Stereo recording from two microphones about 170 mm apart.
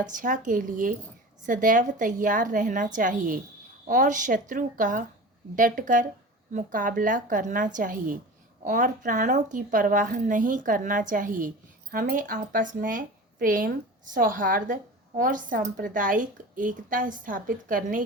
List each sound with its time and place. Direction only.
0.0 s a woman's voice: 50° right (ahead or behind)